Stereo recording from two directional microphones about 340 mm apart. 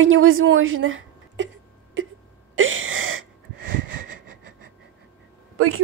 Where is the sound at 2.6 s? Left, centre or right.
Right.